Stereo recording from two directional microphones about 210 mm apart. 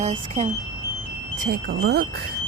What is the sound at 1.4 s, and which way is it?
Speech, 45° right (ahead or behind).